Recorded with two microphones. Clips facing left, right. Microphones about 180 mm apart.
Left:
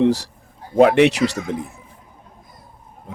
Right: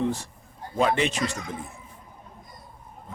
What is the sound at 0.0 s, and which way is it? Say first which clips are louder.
Speech: left 10 dB; 75° left (ahead or behind).